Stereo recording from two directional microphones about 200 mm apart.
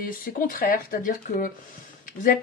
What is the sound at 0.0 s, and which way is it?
Speech, 45° left (ahead or behind).